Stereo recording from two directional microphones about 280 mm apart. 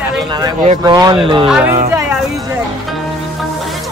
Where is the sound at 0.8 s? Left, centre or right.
Centre.